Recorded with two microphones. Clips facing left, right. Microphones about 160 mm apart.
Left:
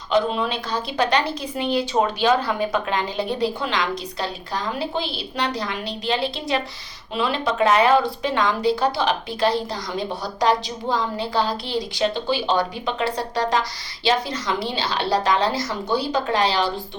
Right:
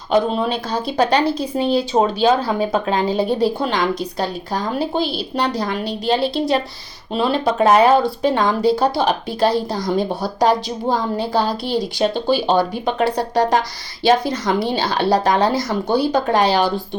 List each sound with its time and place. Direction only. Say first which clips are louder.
0.1 s speech: right 4 dB; 40° right (ahead or behind)
3.7 s a woman's voice: right 5 dB; 50° right (ahead or behind)